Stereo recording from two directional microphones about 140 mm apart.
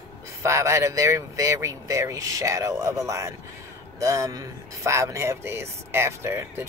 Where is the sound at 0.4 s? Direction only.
20° right (ahead or behind).